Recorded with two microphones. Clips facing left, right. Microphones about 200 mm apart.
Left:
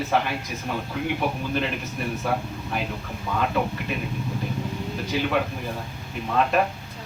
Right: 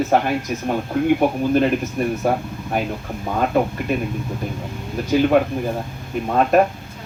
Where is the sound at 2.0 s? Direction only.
45° right (ahead or behind).